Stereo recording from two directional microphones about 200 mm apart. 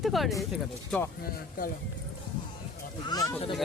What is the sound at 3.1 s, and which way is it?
Speech, 15° left (ahead or behind).